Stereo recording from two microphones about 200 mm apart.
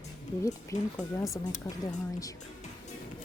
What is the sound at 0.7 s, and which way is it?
Speech, 35° left (ahead or behind).